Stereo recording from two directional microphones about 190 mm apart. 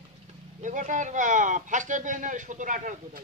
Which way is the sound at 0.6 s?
40° right (ahead or behind).